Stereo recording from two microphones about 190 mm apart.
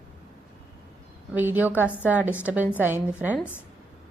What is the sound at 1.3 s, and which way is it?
Speech, 10° right (ahead or behind).